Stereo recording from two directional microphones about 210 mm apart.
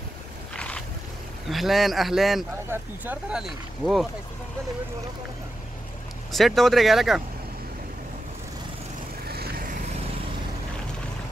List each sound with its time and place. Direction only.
0.6 s a sound: 5° left (ahead or behind)
1.5 s speech: centre (ahead or behind)
6.3 s speech: centre (ahead or behind)
9.3 s vehicle: 45° right (ahead or behind)